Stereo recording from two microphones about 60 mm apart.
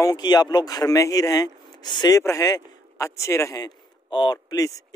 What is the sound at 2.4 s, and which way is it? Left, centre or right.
Speech, left.